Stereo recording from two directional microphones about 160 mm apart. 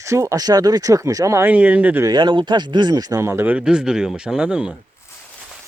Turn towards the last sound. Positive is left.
turn(degrees=-5)  # may be behind; listen again after turning